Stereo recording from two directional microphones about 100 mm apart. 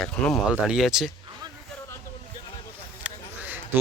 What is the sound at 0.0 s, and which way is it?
Speech, centre (ahead or behind).